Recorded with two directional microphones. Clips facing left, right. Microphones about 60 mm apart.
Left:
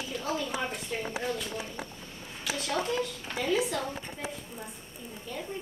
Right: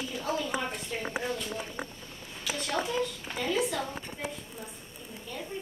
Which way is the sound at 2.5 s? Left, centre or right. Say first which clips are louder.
Left 1 dB; centre.